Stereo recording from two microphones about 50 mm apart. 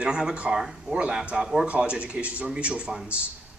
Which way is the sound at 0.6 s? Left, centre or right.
Centre.